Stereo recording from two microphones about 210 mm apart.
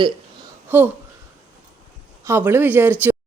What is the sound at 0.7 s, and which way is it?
Speech, 10° right (ahead or behind).